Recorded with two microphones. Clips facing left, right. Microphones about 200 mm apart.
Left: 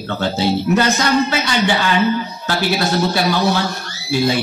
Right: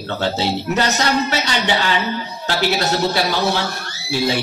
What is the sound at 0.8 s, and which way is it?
A man's voice, 50° left (ahead or behind).